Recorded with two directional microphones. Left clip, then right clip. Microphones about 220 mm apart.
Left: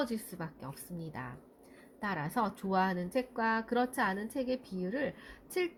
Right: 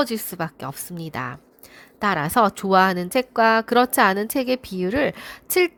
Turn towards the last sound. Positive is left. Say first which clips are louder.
# right 15 dB
turn(degrees=-50)  # may be behind; listen again after turning